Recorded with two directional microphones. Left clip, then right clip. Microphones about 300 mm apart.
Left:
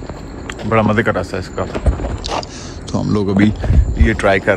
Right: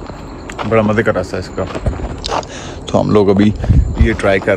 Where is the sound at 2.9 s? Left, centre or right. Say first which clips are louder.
Right 9 dB; centre.